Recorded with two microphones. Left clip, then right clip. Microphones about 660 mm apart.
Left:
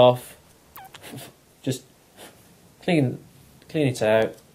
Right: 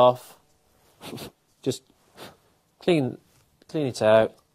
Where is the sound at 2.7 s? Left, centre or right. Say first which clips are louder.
Even; right.